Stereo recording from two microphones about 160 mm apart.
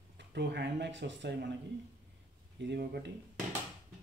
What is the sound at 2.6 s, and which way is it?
Speech, 85° right.